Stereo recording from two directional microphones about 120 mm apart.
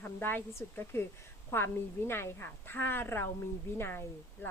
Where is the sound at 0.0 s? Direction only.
15° left (ahead or behind).